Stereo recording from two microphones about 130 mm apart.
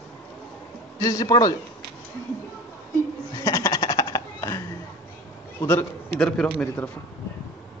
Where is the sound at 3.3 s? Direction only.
25° left (ahead or behind).